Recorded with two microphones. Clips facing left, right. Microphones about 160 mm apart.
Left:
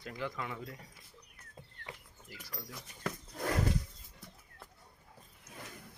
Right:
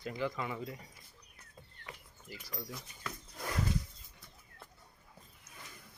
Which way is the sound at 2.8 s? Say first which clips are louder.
Left 5 dB; 55° left (ahead or behind).